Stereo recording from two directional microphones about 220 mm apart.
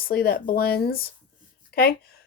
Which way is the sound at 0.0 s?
45° left (ahead or behind).